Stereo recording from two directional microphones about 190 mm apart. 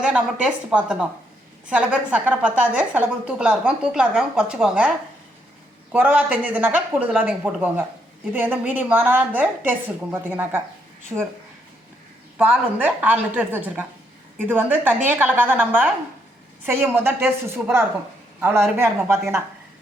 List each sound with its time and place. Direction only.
0.0 s a woman's voice: 5° right (ahead or behind)
5.9 s speech: 10° right (ahead or behind)
11.1 s speech: 20° right (ahead or behind)
12.4 s speech: 10° right (ahead or behind)